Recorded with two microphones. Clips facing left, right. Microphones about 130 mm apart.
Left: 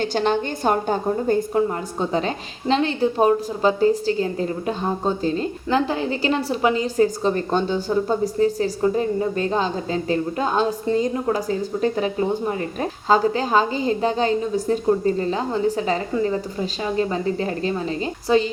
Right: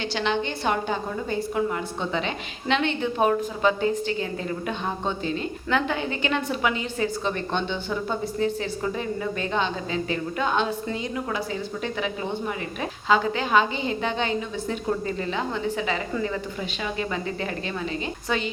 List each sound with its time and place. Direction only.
0.0 s a woman's voice: 45° left (ahead or behind)